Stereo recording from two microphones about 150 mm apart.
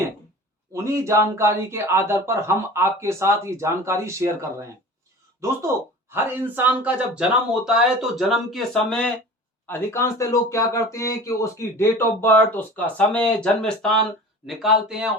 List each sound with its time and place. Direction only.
0.7 s speech: 20° right (ahead or behind); by 9.1 s 5° left (ahead or behind)
9.6 s speech: 15° left (ahead or behind); by 15.1 s 5° right (ahead or behind)